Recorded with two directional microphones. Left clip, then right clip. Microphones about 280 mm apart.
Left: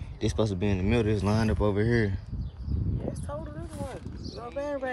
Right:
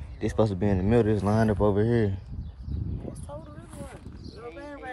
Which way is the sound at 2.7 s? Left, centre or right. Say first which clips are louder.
Left 3 dB; left.